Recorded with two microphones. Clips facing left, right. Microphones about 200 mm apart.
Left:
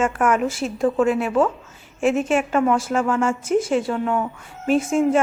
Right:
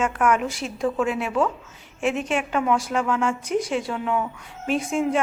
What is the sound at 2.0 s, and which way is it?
Speech, 45° left (ahead or behind).